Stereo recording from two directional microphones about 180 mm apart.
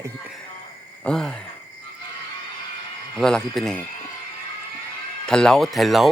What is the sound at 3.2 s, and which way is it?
Speech, 5° left (ahead or behind).